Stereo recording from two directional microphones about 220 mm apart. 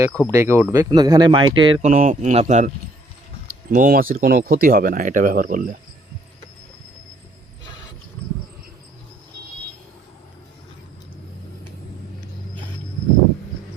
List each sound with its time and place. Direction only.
0.3 s speech: 10° right (ahead or behind); by 5.7 s 40° right (ahead or behind)